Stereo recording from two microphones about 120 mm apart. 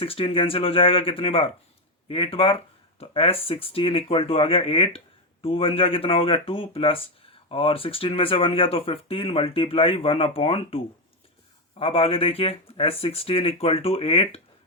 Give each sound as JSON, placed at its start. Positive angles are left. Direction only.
{"t": 0.0, "sound": "speech", "side_deg": 50}